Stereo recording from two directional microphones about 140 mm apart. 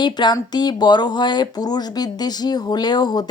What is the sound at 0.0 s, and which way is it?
Speech, 30° left (ahead or behind).